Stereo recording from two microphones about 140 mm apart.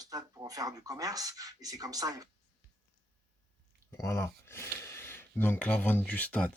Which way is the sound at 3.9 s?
20° left (ahead or behind).